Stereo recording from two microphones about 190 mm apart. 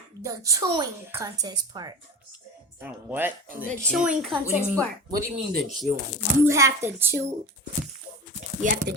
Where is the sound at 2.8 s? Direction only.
10° right (ahead or behind).